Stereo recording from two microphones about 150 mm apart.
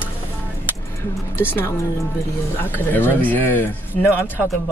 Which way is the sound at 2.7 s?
15° left (ahead or behind).